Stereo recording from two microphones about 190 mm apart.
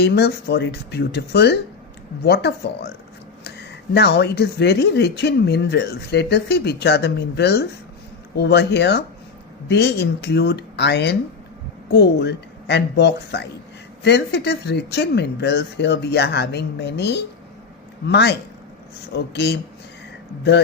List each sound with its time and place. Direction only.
0.0 s speech: 60° left (ahead or behind)